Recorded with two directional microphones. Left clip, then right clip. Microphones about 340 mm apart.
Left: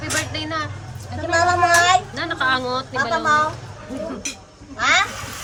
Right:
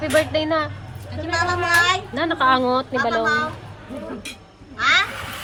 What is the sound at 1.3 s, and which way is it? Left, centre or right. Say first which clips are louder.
Speech: left 3 dB; left.